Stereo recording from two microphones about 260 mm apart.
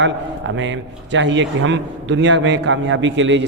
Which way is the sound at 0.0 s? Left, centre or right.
Right.